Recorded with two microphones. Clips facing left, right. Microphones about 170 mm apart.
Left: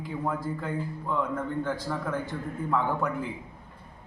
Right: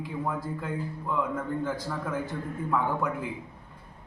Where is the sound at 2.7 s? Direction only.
Centre (ahead or behind).